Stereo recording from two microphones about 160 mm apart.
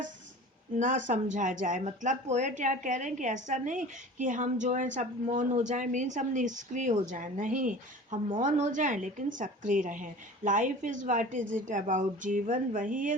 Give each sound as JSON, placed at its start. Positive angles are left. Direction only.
{"t": 0.8, "sound": "speech", "side_deg": -50}